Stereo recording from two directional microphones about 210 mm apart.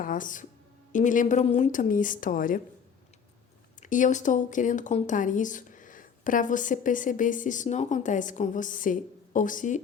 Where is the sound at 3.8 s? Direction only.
35° left (ahead or behind).